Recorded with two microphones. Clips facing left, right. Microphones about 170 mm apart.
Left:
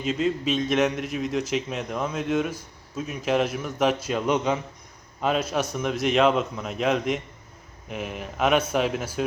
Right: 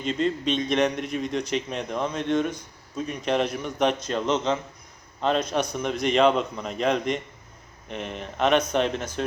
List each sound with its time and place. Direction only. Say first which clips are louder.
0.0 s a man's voice: even; 5° left (ahead or behind)